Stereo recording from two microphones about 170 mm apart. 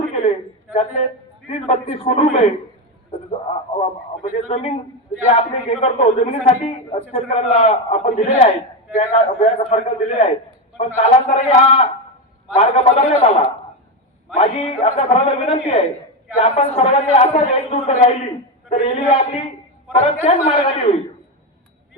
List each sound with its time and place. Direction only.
0.1 s a sound: 35° left (ahead or behind)
1.5 s a man's voice: 35° left (ahead or behind)
3.8 s a man's voice: 40° left (ahead or behind)